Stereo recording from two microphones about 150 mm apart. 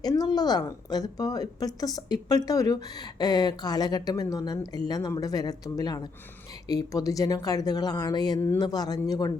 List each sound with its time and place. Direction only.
0.0 s a woman's voice: 25° left (ahead or behind)